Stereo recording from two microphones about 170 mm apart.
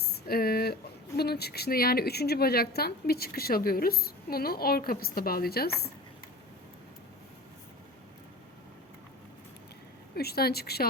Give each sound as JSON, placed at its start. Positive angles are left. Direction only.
{"t": 0.0, "sound": "speech", "side_deg": 65}
{"t": 10.2, "sound": "a woman's voice", "side_deg": 65}